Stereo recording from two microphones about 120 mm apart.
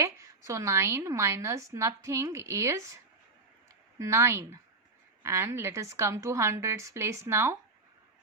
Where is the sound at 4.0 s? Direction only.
25° right (ahead or behind).